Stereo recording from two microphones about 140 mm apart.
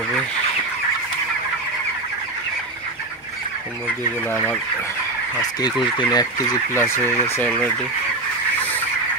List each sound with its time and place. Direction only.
5.9 s fowl: 30° left (ahead or behind)
6.7 s speech: 15° left (ahead or behind)